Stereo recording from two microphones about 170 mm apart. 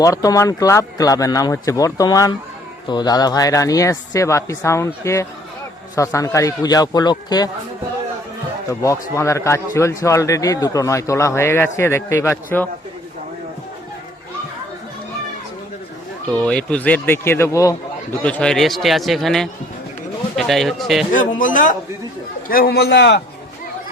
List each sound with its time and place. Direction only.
0.0 s speech: 20° left (ahead or behind)
8.6 s a man's voice: 20° left (ahead or behind)
16.3 s a man's voice: 5° left (ahead or behind)
18.2 s speech: 10° left (ahead or behind)
21.1 s speech: 50° left (ahead or behind)
22.4 s a man's voice: 60° left (ahead or behind); by 23.2 s 90° left